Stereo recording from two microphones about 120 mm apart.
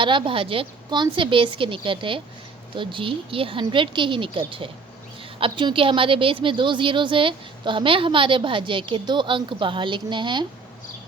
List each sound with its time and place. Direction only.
0.0 s a woman's voice: 45° right (ahead or behind)